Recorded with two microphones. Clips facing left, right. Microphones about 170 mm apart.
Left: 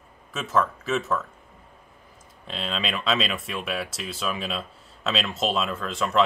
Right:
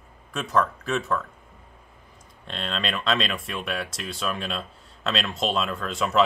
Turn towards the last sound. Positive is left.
turn(degrees=0)  # may be behind; listen again after turning